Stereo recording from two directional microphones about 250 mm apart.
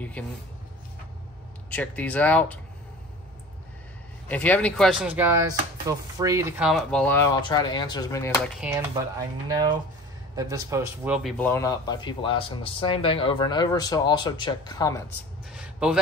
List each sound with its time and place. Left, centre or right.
0.2 s speech: centre
1.7 s speech: centre
4.3 s speech: centre
6.7 s speech: centre
7.4 s speech: centre
8.6 s speech: centre
9.5 s a man's voice: centre
11.2 s speech: centre
15.5 s a man's voice: centre